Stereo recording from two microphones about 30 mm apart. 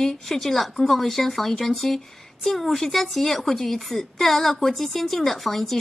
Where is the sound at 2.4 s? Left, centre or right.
Centre.